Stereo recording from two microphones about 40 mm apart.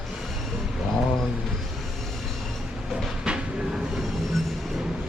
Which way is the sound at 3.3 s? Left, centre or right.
Right.